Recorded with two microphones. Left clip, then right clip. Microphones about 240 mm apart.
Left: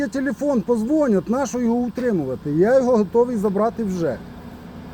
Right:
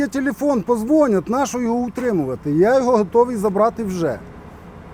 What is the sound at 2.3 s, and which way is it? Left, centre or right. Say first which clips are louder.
Speech: right 1 dB; centre.